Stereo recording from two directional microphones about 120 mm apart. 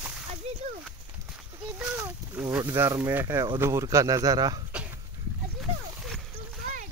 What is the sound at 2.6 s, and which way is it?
A man's voice, 25° right (ahead or behind).